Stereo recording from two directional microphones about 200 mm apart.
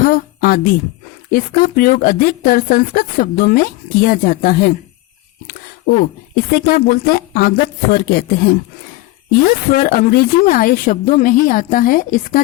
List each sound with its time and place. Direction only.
0.0 s speech: 45° left (ahead or behind)